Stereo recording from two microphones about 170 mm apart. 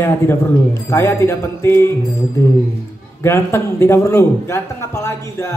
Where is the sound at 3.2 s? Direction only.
15° left (ahead or behind).